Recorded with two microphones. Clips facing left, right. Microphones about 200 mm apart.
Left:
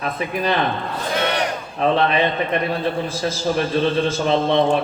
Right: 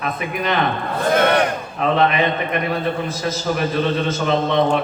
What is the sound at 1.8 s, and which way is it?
A man's voice, 30° left (ahead or behind).